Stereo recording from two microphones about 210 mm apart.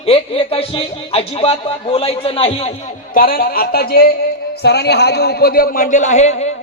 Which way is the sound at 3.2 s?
45° left (ahead or behind).